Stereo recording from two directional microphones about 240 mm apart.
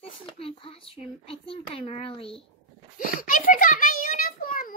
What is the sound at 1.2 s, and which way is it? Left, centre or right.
A child's voice, left.